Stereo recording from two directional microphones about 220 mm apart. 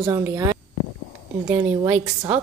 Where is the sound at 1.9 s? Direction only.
5° right (ahead or behind).